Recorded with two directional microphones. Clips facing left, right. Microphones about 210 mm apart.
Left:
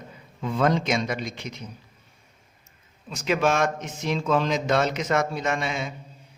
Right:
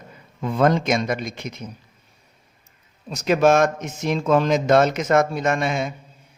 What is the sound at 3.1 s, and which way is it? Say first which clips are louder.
Speech: right 6 dB; 40° right (ahead or behind).